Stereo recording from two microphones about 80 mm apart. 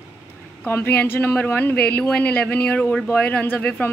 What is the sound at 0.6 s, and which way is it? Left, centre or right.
A woman's voice, left.